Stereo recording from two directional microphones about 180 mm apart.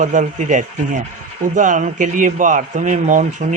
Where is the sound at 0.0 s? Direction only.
45° right (ahead or behind).